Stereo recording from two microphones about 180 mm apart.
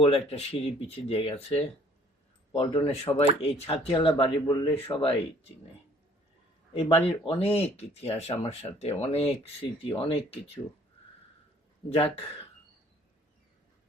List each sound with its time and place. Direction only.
0.0 s speech: 35° left (ahead or behind)
6.7 s speech: 35° left (ahead or behind)
11.9 s speech: 30° left (ahead or behind)